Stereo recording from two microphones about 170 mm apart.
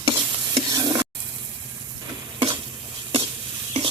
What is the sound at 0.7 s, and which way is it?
Stir, 25° right (ahead or behind).